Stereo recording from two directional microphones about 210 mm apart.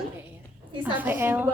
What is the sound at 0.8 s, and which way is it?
Speech, 10° right (ahead or behind).